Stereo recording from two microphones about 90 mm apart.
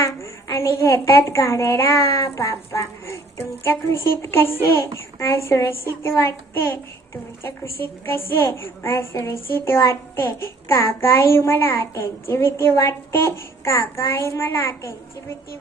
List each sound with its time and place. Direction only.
0.0 s a woman's voice: 35° left (ahead or behind)